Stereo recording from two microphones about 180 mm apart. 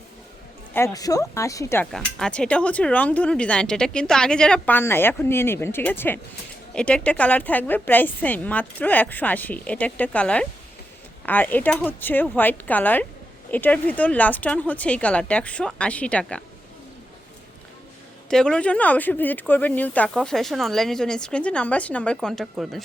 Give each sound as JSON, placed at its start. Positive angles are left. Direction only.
{"t": 0.7, "sound": "speech", "side_deg": 15}
{"t": 1.9, "sound": "speech", "side_deg": 5}
{"t": 18.3, "sound": "speech", "side_deg": 5}